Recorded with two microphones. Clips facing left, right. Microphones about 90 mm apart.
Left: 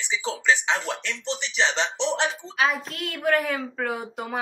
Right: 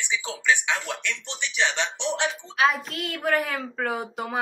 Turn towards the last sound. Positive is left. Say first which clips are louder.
# right 1 dB
turn(degrees=0)  # may be behind; listen again after turning